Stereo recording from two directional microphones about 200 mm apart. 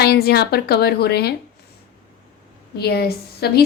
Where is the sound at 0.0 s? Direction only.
55° left (ahead or behind).